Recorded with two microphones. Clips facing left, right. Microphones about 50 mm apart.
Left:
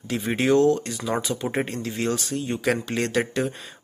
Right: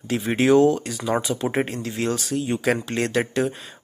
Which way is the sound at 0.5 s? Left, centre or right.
Right.